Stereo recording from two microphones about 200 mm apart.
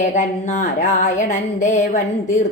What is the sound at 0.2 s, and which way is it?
Speech, 35° left (ahead or behind).